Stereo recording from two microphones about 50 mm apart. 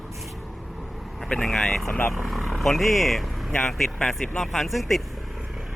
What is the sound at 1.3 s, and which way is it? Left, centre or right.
Mantra, centre.